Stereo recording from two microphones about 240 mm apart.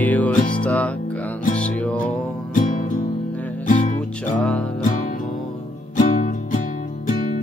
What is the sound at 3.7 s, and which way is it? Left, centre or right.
Music, left.